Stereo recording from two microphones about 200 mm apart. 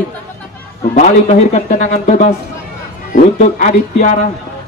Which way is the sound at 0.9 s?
35° left (ahead or behind).